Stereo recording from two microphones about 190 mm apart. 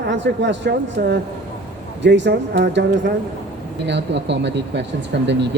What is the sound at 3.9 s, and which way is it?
A woman's voice, 65° right (ahead or behind).